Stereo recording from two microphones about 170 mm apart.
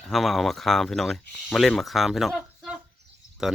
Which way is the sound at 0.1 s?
Centre (ahead or behind).